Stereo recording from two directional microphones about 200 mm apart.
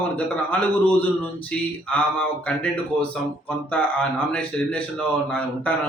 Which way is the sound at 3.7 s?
5° left (ahead or behind).